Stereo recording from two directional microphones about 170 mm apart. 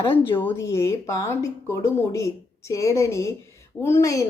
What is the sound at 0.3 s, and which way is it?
A woman's voice, 15° left (ahead or behind).